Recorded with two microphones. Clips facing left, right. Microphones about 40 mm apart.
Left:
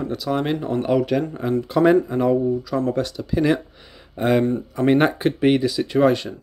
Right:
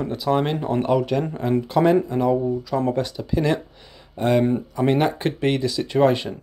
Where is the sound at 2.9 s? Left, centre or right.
Centre.